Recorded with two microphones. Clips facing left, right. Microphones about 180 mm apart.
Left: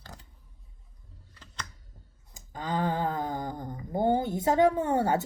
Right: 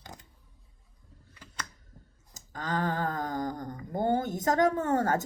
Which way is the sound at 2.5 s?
15° left (ahead or behind).